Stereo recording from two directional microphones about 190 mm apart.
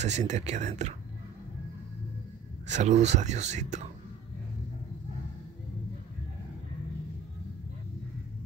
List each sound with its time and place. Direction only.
0.0 s speech: 35° right (ahead or behind)
2.6 s speech: 40° right (ahead or behind)